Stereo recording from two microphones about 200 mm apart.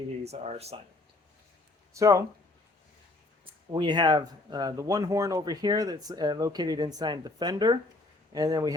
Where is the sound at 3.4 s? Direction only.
20° right (ahead or behind).